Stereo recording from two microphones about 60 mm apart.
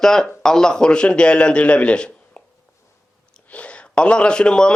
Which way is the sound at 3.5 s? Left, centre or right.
Centre.